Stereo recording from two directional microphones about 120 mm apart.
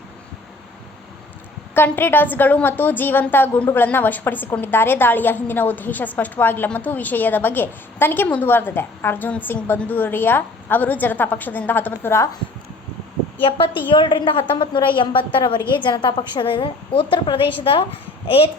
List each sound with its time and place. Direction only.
1.7 s a woman's voice: 20° left (ahead or behind)
13.4 s a woman's voice: 45° left (ahead or behind)